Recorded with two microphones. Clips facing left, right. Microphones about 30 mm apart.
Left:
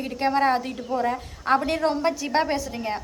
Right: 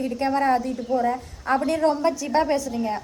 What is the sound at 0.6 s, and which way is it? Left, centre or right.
Speech, left.